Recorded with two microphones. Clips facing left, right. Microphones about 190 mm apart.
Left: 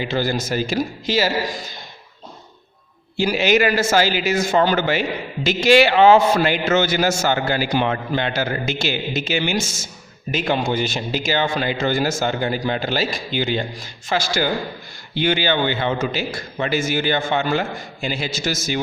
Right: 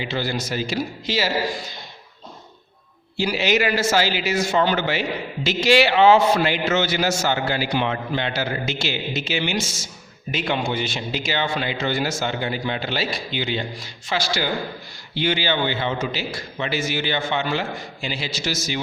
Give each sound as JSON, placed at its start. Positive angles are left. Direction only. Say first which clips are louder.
{"t": 0.0, "sound": "a man's voice", "louder": "left 4 dB", "side_deg": 45}
{"t": 3.2, "sound": "a man's voice", "louder": "left 4 dB", "side_deg": 50}